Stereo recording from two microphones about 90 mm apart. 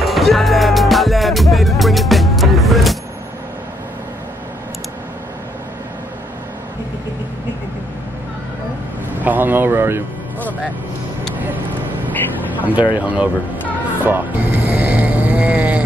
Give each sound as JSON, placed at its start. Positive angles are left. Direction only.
{"t": 0.0, "sound": "music", "side_deg": 0}
{"t": 9.2, "sound": "speech", "side_deg": -20}
{"t": 12.9, "sound": "speech", "side_deg": -15}
{"t": 14.0, "sound": "music", "side_deg": -20}